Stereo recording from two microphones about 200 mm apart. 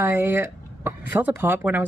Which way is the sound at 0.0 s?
10° right (ahead or behind).